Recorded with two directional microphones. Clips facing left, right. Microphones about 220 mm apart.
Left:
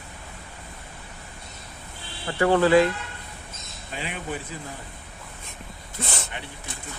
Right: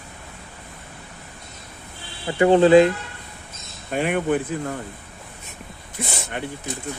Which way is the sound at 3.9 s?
55° right (ahead or behind).